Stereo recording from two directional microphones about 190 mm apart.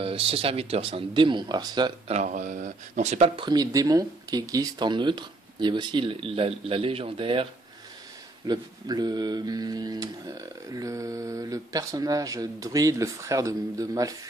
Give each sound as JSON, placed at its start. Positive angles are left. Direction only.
{"t": 0.0, "sound": "mantra", "side_deg": -30}
{"t": 2.0, "sound": "speech", "side_deg": -40}
{"t": 3.4, "sound": "mantra", "side_deg": -20}
{"t": 8.5, "sound": "mantra", "side_deg": -20}